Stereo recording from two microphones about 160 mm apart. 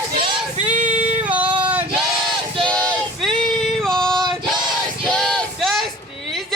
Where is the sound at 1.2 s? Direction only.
10° right (ahead or behind).